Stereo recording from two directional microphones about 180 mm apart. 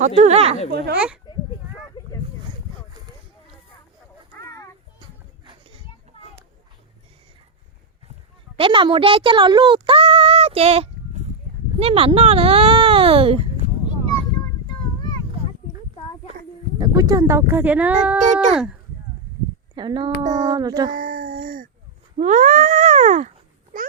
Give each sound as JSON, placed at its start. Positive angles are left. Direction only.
{"t": 0.2, "sound": "speech", "side_deg": -35}
{"t": 0.9, "sound": "speech", "side_deg": -5}
{"t": 4.4, "sound": "children playing", "side_deg": 15}
{"t": 6.1, "sound": "children playing", "side_deg": 35}
{"t": 8.5, "sound": "speech", "side_deg": -30}
{"t": 16.7, "sound": "speech", "side_deg": -20}
{"t": 19.7, "sound": "speech", "side_deg": -25}
{"t": 20.2, "sound": "a sound", "side_deg": -45}
{"t": 20.5, "sound": "child singing", "side_deg": -20}
{"t": 20.9, "sound": "a sound", "side_deg": -55}